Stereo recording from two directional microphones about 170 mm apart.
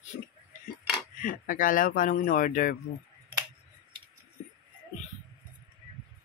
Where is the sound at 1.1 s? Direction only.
50° left (ahead or behind).